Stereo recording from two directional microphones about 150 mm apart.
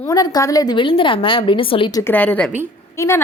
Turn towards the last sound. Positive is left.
turn(degrees=20)  # may be behind; listen again after turning